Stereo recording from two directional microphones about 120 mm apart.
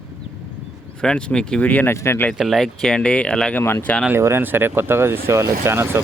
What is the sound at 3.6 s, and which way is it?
Speech, 20° left (ahead or behind).